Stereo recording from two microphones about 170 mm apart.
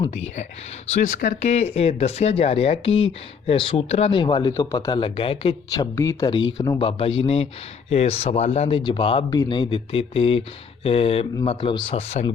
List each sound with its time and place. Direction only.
0.0 s speech: 40° left (ahead or behind)
5.7 s speech: 20° left (ahead or behind); by 8.8 s 40° left (ahead or behind)
8.8 s speech: 30° left (ahead or behind)